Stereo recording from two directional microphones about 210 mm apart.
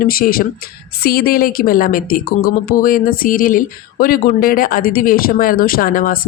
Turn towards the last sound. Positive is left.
turn(degrees=40)  # may be behind; listen again after turning